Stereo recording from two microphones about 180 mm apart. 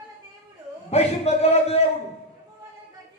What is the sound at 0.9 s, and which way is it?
Speech, 35° left (ahead or behind).